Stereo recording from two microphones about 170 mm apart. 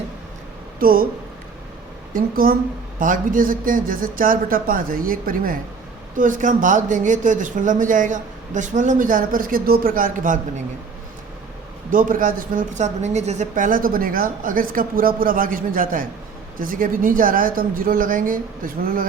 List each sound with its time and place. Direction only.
0.8 s speech: 55° right (ahead or behind)
2.1 s speech: 60° right (ahead or behind)
11.9 s speech: 50° right (ahead or behind)